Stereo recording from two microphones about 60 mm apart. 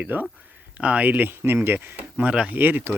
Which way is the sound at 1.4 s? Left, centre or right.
Right.